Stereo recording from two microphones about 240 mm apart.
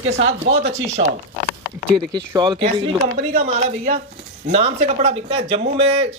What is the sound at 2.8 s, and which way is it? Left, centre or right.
Speech, right.